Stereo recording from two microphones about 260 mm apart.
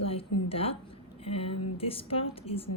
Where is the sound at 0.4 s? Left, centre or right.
Left.